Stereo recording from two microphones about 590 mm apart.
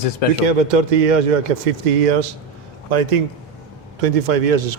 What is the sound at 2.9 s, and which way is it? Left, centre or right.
Speech, right.